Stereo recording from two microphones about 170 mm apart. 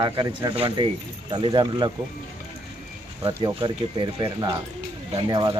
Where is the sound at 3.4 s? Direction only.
25° right (ahead or behind).